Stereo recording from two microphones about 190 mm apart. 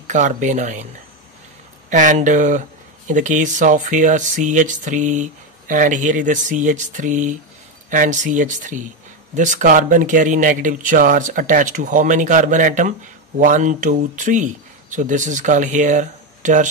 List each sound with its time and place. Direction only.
0.0 s speech: 40° right (ahead or behind)
1.9 s speech: 40° right (ahead or behind)